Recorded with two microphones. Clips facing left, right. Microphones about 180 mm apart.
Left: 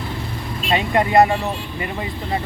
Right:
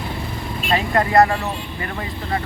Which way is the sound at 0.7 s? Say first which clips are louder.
Left 1 dB; 20° left (ahead or behind).